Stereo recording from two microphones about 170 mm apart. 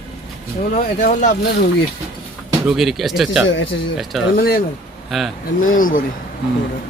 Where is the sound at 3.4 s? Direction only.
90° left.